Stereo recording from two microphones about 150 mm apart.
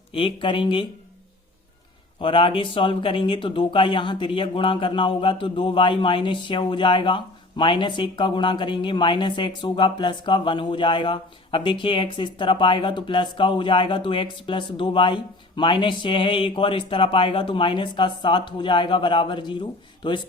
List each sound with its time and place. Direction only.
0.1 s speech: 35° left (ahead or behind)
2.2 s speech: 35° left (ahead or behind)